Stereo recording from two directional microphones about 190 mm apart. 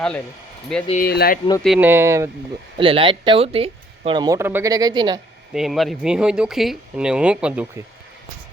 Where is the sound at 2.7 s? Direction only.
30° right (ahead or behind).